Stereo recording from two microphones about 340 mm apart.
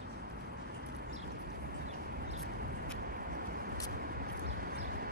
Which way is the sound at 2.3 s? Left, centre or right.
Right.